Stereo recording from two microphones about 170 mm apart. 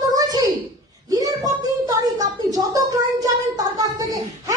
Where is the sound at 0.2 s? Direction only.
20° right (ahead or behind).